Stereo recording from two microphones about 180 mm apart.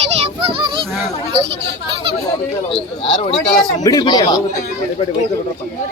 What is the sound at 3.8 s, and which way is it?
Speech, 20° left (ahead or behind).